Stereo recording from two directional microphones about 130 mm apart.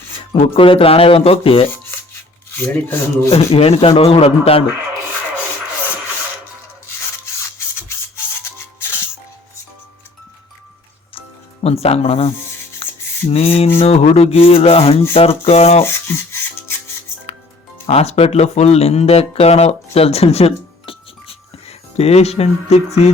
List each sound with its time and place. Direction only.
0.3 s speech: 40° left (ahead or behind)
2.5 s speech: 15° left (ahead or behind)
3.2 s speech: 50° left (ahead or behind)
7.9 s music: 20° left (ahead or behind)
11.6 s speech: 50° left (ahead or behind)
12.8 s rub: 45° left (ahead or behind)
13.3 s speech: 50° left (ahead or behind)
15.8 s rub: 20° left (ahead or behind)
17.8 s speech: 55° left (ahead or behind)